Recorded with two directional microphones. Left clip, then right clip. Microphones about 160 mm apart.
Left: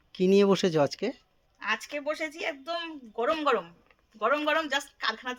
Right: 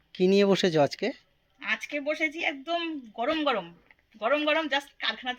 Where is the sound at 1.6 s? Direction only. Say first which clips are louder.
Right 1 dB; 25° left (ahead or behind).